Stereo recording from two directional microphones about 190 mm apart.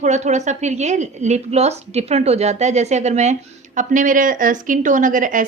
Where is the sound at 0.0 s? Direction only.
35° right (ahead or behind).